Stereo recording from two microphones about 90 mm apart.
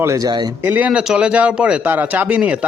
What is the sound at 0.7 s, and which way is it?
Speech, 15° right (ahead or behind).